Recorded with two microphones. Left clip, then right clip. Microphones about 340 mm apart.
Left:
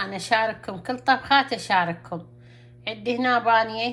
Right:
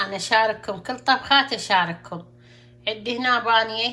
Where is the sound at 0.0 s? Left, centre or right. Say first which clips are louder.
Right 3 dB; centre.